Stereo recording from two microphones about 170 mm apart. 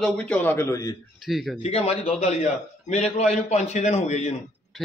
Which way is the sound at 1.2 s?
Centre (ahead or behind).